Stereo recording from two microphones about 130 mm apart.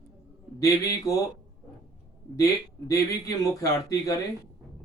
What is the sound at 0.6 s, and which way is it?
Speech, 25° left (ahead or behind).